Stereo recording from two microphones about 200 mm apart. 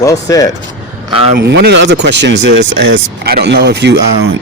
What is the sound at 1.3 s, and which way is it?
Speech, 55° right (ahead or behind).